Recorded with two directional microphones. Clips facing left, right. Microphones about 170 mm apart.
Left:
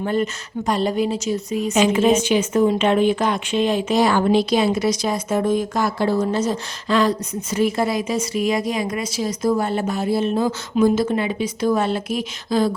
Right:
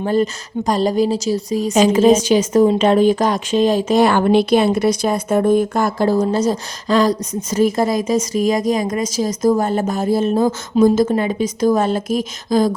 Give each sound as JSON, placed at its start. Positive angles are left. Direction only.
{"t": 0.0, "sound": "a woman's voice", "side_deg": -35}
{"t": 4.0, "sound": "speech", "side_deg": -60}